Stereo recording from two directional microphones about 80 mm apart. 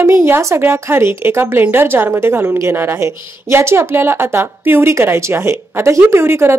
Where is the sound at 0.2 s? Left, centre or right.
Right.